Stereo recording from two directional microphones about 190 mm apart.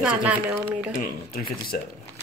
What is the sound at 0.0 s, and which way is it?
Speech, 5° right (ahead or behind).